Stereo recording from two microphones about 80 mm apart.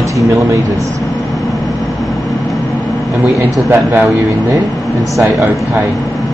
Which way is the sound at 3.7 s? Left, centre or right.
Right.